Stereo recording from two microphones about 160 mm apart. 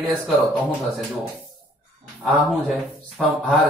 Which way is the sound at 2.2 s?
Centre (ahead or behind).